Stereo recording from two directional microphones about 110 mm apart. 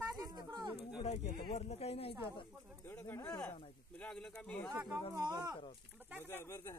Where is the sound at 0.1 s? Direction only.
40° right (ahead or behind).